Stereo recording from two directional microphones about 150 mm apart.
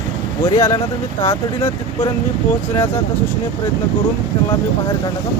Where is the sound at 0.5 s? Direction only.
30° left (ahead or behind).